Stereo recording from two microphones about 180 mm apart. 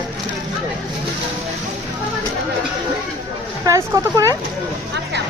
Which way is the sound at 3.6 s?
20° right (ahead or behind).